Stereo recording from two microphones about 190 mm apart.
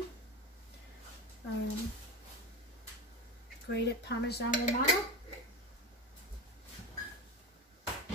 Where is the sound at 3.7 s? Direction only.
60° left (ahead or behind).